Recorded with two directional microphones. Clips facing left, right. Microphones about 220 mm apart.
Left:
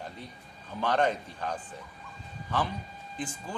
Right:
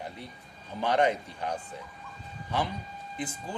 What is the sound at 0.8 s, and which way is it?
Speech, 15° right (ahead or behind).